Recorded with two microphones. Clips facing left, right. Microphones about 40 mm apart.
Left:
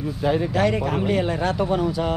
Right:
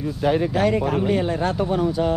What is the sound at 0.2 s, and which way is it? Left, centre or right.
Speech, right.